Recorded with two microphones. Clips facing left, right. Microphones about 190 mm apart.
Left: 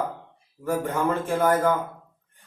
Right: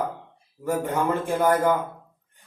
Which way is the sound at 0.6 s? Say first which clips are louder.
Even; 15° right (ahead or behind).